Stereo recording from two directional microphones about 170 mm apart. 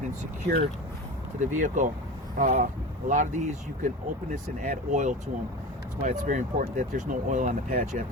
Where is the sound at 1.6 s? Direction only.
50° right (ahead or behind).